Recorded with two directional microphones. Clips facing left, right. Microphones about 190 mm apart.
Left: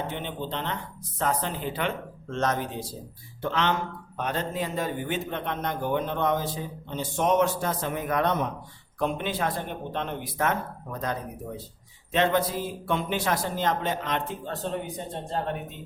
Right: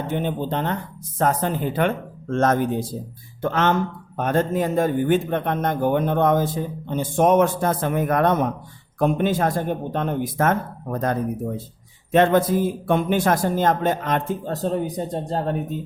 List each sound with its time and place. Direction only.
0.1 s a man's voice: 45° right (ahead or behind)